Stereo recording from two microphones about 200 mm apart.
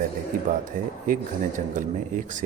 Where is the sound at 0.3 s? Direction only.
45° right (ahead or behind).